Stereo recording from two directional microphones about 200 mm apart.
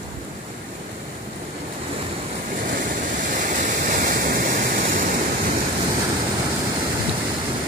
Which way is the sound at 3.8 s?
50° right (ahead or behind).